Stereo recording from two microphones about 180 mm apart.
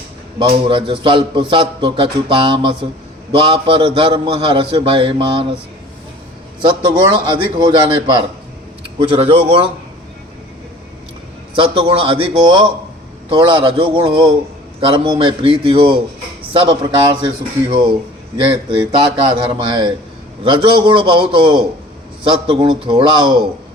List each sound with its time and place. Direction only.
0.3 s a man's voice: 30° right (ahead or behind)
6.6 s a man's voice: 25° right (ahead or behind)
11.5 s a man's voice: 30° right (ahead or behind)